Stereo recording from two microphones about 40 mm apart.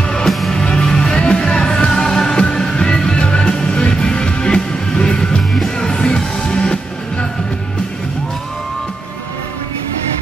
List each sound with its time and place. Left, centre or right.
0.0 s music: centre